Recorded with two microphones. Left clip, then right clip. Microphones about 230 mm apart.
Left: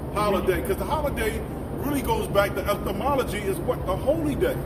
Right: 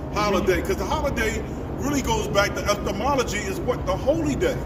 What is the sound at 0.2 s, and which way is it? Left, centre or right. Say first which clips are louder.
A man's voice: right 2 dB; right.